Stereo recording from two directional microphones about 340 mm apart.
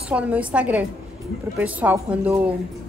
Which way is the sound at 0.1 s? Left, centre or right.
Centre.